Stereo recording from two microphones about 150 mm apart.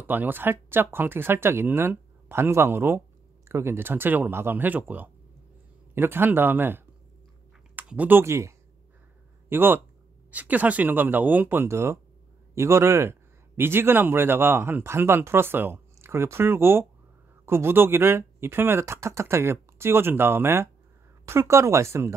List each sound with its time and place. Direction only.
0.0 s a man's voice: 15° right (ahead or behind)